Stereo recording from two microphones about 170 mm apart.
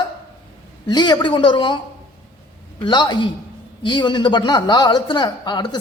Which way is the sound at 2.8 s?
25° left (ahead or behind).